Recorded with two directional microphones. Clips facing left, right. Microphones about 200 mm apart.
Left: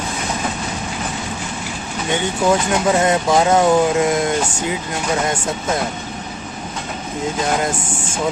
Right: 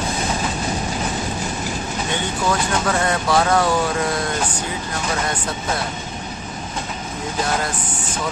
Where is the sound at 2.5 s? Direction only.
20° left (ahead or behind).